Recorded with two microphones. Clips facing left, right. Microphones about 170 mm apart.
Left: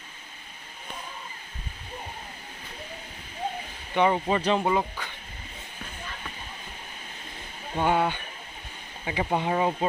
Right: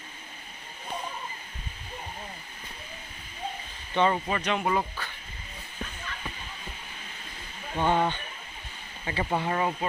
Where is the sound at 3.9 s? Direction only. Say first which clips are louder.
Left 2 dB; 15° left (ahead or behind).